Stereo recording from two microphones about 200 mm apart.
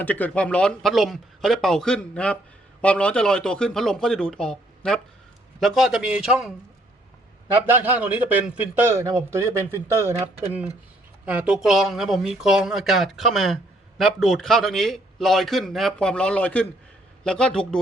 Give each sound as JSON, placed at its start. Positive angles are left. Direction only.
{"t": 0.0, "sound": "a man's voice", "side_deg": 10}